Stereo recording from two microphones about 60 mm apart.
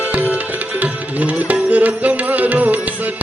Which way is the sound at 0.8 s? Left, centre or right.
Right.